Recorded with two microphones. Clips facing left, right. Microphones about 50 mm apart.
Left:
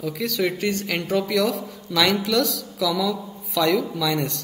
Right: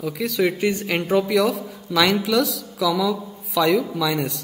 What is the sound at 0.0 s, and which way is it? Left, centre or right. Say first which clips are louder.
Speech: right 2 dB; centre.